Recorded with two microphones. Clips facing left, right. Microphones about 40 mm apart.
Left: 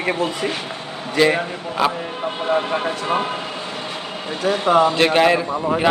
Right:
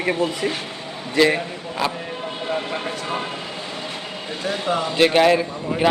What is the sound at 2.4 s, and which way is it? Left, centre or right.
Speech, left.